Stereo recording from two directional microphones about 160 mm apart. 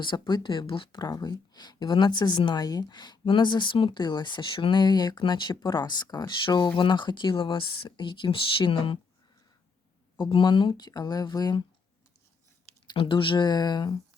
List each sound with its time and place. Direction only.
0.0 s speech: 30° left (ahead or behind)
10.2 s speech: 30° left (ahead or behind)
12.9 s speech: 30° left (ahead or behind)